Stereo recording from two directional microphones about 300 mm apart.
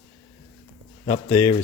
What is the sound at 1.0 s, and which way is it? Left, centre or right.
Speech, centre.